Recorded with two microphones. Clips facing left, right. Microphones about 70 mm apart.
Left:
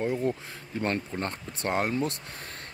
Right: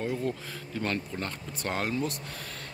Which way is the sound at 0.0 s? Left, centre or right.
Centre.